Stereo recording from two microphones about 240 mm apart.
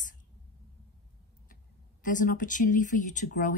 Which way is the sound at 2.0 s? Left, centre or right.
Left.